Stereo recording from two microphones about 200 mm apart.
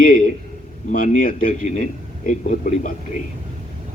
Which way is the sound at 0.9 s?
40° left (ahead or behind).